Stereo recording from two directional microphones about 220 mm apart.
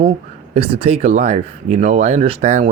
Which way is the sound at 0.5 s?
25° right (ahead or behind).